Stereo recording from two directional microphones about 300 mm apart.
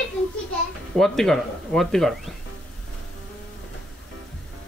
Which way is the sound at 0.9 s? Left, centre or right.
Centre.